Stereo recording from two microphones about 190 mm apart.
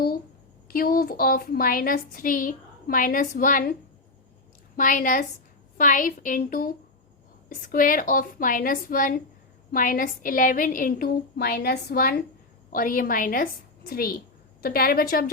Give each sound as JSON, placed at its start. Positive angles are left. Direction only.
{"t": 0.7, "sound": "a woman's voice", "side_deg": 50}
{"t": 4.8, "sound": "a woman's voice", "side_deg": 45}